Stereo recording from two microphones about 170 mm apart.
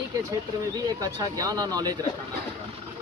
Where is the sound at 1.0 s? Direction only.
20° right (ahead or behind).